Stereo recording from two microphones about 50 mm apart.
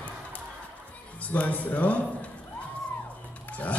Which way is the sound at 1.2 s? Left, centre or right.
Left.